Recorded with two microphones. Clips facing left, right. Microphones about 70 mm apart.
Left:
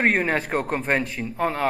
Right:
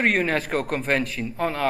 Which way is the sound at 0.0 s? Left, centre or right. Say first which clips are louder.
Left 1 dB; left.